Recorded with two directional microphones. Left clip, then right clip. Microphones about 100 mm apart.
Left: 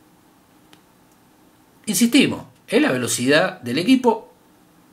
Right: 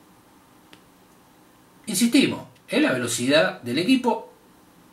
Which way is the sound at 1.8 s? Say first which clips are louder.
Left 3 dB; 35° left (ahead or behind).